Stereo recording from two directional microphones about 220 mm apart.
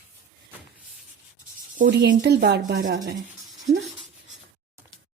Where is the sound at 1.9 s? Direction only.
50° right (ahead or behind).